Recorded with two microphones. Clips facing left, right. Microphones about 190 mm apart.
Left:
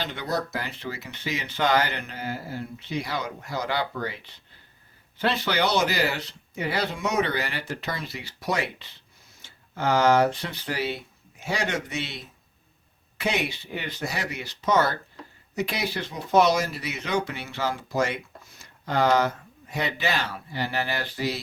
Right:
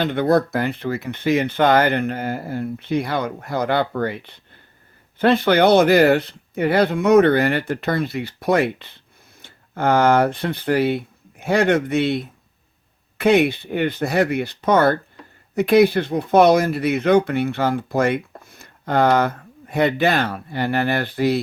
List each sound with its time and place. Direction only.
0.0 s speech: 55° right (ahead or behind)